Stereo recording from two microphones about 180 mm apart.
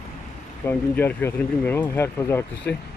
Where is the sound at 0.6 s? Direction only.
10° left (ahead or behind).